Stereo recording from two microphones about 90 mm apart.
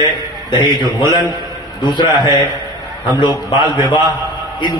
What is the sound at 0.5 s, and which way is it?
A man's voice, 55° left (ahead or behind).